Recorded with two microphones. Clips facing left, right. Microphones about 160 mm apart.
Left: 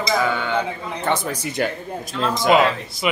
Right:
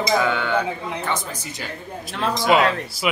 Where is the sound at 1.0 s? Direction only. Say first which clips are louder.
Left 9 dB; 60° left (ahead or behind).